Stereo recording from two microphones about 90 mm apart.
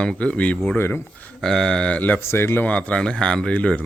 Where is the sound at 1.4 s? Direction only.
5° left (ahead or behind).